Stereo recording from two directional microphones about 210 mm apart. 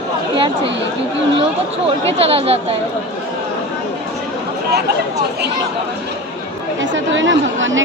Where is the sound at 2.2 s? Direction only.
30° right (ahead or behind).